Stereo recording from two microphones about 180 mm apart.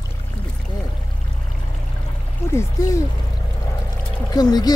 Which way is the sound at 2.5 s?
15° left (ahead or behind).